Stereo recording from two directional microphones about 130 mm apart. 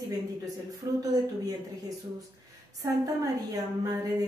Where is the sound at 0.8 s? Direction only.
25° right (ahead or behind).